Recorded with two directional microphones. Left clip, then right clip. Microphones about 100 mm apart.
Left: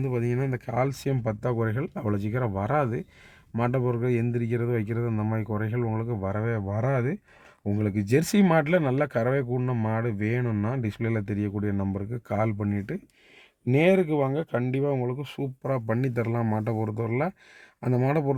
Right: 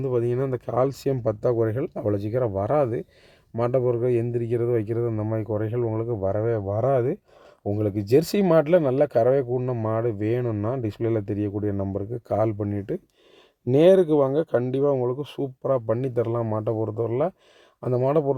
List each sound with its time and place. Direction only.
0.0 s speech: 35° right (ahead or behind)
9.6 s speech: 15° right (ahead or behind)
9.9 s speech: 30° right (ahead or behind)
13.7 s speech: 45° right (ahead or behind)
15.9 s speech: 15° right (ahead or behind)